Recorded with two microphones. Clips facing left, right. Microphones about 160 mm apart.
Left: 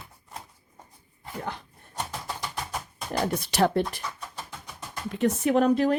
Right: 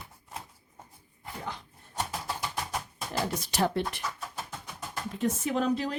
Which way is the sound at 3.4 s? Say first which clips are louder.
Left 5 dB; 70° left (ahead or behind).